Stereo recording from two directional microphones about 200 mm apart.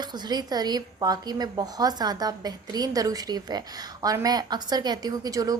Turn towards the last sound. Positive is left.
turn(degrees=-20)  # may be behind; listen again after turning